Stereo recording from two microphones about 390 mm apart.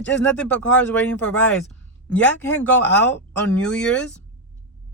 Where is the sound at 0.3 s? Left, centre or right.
Centre.